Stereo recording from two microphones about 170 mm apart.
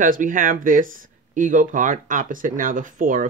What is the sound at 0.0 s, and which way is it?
Speech, 50° right (ahead or behind).